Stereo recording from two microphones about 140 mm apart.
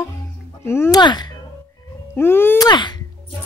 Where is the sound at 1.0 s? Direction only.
30° left (ahead or behind).